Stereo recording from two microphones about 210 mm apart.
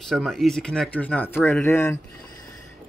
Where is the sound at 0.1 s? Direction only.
Centre (ahead or behind).